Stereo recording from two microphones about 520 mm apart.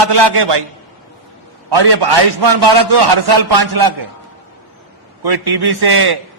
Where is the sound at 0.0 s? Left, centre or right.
Right.